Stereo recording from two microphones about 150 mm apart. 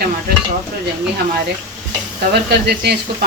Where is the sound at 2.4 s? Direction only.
90° right.